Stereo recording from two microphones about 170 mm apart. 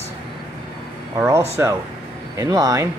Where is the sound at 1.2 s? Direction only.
15° right (ahead or behind).